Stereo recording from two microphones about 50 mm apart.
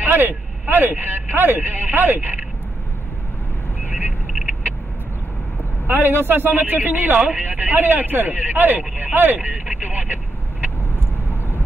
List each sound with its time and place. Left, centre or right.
0.0 s speech: right
5.9 s a man's voice: right